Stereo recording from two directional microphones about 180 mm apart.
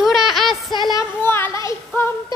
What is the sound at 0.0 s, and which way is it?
Music, centre (ahead or behind).